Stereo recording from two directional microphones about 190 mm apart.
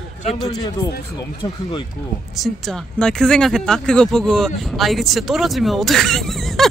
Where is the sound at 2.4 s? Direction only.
Centre (ahead or behind).